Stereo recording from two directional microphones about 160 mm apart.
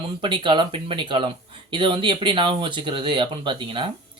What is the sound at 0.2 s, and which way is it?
Speech, 30° right (ahead or behind).